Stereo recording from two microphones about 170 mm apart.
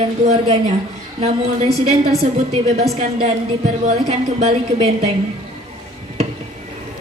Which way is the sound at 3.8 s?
40° right (ahead or behind).